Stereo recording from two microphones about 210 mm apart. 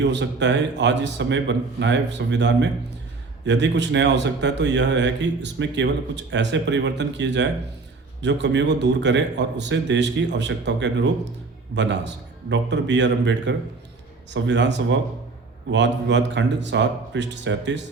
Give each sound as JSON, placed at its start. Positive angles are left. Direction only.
{"t": 0.0, "sound": "a man's voice", "side_deg": -55}